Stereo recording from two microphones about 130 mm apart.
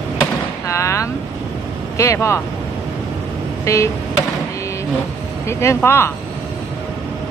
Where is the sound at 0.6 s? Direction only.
25° left (ahead or behind).